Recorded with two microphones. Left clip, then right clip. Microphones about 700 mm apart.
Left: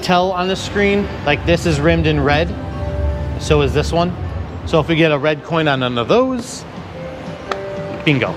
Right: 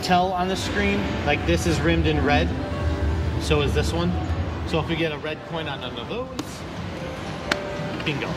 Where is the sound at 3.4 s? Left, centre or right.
Left.